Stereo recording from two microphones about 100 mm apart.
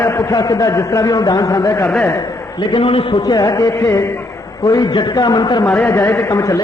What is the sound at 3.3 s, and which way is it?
A man's voice, 40° left (ahead or behind).